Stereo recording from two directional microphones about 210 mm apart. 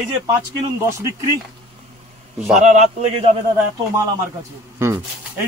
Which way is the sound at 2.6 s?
35° right (ahead or behind).